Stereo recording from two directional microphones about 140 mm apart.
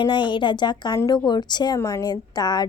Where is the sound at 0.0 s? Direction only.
35° left (ahead or behind).